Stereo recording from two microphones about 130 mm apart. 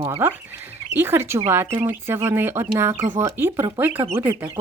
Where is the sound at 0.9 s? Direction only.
15° right (ahead or behind).